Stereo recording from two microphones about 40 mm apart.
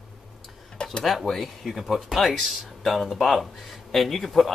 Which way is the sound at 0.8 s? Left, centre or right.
Left.